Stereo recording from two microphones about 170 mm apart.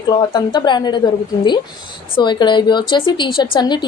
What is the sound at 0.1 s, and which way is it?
A woman's voice, 25° left (ahead or behind).